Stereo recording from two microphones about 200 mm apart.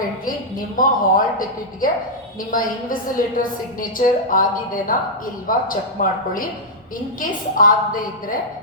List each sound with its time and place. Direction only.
0.8 s a woman's voice: 45° left (ahead or behind)
7.6 s a woman's voice: 45° left (ahead or behind)